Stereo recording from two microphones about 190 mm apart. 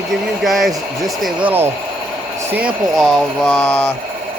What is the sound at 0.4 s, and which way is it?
Speech, centre (ahead or behind).